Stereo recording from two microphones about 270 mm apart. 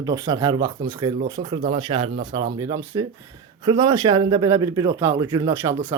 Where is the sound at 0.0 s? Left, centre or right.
Centre.